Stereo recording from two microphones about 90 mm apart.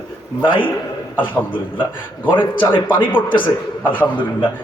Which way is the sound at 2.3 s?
65° left (ahead or behind).